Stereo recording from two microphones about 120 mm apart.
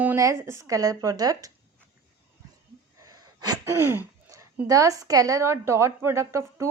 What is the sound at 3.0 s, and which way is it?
Sneeze, 30° right (ahead or behind).